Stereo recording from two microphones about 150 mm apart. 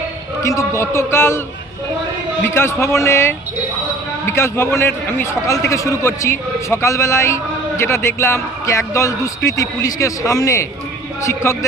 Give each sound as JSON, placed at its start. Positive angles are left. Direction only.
{"t": 0.4, "sound": "a man's voice", "side_deg": 20}
{"t": 2.4, "sound": "a man's voice", "side_deg": 15}